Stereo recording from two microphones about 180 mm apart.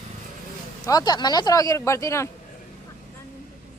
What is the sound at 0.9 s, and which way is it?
Speech, 20° left (ahead or behind).